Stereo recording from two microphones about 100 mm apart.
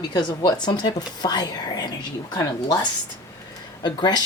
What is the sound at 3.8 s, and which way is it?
Speech, 45° left (ahead or behind).